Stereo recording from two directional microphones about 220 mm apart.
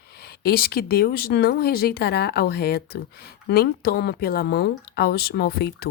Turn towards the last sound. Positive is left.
turn(degrees=45)  # may be behind; listen again after turning